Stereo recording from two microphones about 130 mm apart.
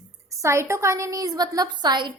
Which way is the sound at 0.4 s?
20° right (ahead or behind).